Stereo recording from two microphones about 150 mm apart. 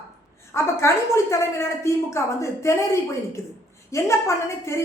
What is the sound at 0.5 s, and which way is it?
A woman's voice, 20° left (ahead or behind).